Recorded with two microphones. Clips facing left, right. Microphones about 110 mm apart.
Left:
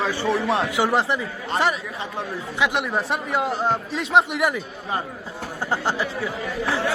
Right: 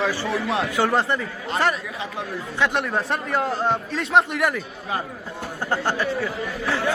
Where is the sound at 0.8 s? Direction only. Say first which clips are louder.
Right 2 dB; 5° left (ahead or behind).